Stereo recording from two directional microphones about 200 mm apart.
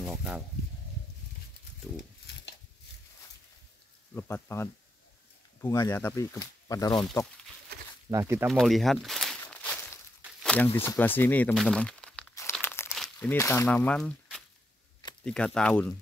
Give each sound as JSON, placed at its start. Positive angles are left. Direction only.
{"t": 0.0, "sound": "a sound", "side_deg": -5}
{"t": 4.1, "sound": "speech", "side_deg": 15}
{"t": 8.1, "sound": "speech", "side_deg": -15}
{"t": 8.5, "sound": "speech", "side_deg": 0}
{"t": 9.4, "sound": "walk", "side_deg": 5}
{"t": 10.4, "sound": "a sound", "side_deg": 5}
{"t": 10.8, "sound": "speech", "side_deg": 10}
{"t": 12.5, "sound": "crunch", "side_deg": 10}
{"t": 12.9, "sound": "speech", "side_deg": 5}